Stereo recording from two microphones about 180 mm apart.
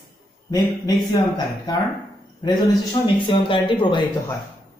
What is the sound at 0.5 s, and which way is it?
A man's voice, 20° left (ahead or behind).